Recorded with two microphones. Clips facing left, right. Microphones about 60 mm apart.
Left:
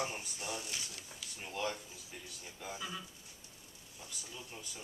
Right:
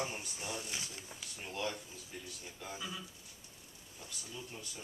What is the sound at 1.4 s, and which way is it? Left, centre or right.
Speech, centre.